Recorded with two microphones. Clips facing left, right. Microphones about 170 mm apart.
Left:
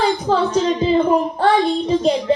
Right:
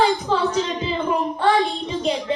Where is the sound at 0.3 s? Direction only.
40° left (ahead or behind).